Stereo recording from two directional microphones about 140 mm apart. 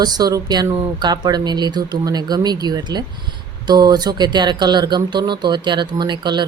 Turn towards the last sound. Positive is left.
turn(degrees=-30)  # may be behind; listen again after turning